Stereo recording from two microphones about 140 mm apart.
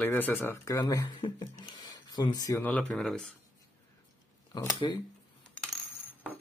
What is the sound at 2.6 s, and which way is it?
Speech, 10° left (ahead or behind).